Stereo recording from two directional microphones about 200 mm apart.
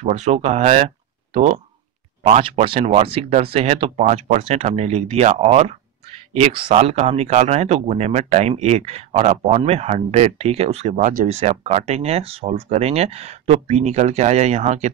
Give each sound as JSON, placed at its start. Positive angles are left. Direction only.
{"t": 0.0, "sound": "speech", "side_deg": -35}